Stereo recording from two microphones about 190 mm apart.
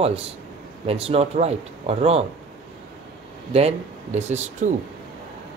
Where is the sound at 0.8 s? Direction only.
30° right (ahead or behind).